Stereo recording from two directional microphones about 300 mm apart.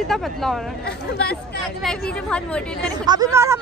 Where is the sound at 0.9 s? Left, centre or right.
Left.